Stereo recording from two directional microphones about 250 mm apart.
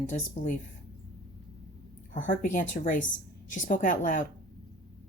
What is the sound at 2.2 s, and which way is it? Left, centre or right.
A woman's voice, left.